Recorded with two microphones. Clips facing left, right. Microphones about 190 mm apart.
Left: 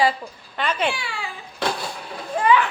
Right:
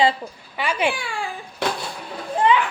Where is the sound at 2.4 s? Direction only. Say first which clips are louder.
Even; 20° right (ahead or behind).